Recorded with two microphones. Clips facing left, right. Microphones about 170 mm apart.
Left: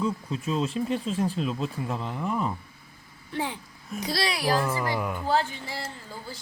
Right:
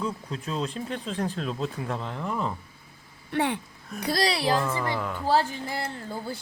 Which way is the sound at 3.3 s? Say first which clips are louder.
Right 5 dB; 65° right (ahead or behind).